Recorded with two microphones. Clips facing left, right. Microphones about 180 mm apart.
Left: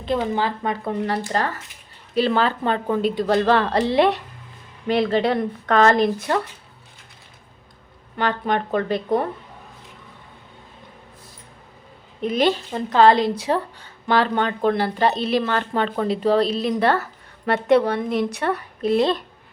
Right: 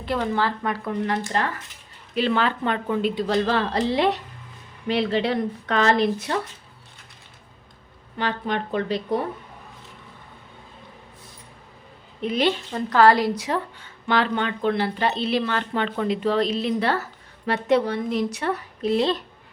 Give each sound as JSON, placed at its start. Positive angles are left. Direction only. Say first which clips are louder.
{"t": 0.2, "sound": "a woman's voice", "louder": "left 1 dB", "side_deg": 15}
{"t": 4.9, "sound": "a woman's voice", "louder": "left 3 dB", "side_deg": 50}
{"t": 8.2, "sound": "a woman's voice", "louder": "left 4 dB", "side_deg": 50}
{"t": 12.2, "sound": "a woman's voice", "louder": "left 3 dB", "side_deg": 45}
{"t": 12.7, "sound": "a woman's voice", "louder": "left 1 dB", "side_deg": 20}